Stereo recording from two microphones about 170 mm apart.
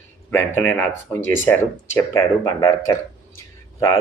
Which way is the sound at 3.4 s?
15° left (ahead or behind).